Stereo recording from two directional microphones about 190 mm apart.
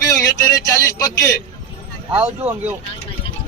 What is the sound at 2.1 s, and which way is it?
Speech, 10° right (ahead or behind).